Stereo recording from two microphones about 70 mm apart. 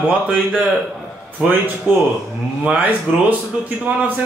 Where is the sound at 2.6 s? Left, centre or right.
Right.